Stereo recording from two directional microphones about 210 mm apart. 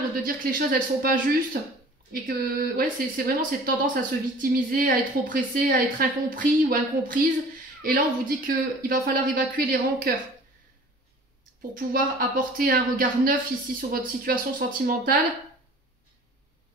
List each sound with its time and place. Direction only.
0.2 s speech: 40° right (ahead or behind)
11.7 s speech: 45° right (ahead or behind)